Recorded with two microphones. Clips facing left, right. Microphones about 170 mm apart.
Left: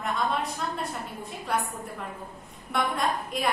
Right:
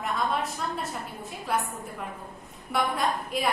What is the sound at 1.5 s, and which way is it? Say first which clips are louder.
Speech: even; centre (ahead or behind).